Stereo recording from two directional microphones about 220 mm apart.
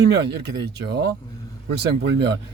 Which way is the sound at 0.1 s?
50° right (ahead or behind).